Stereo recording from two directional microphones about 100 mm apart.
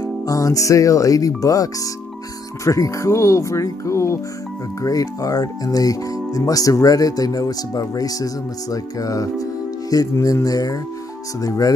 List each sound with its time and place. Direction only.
0.0 s speech: 35° left (ahead or behind)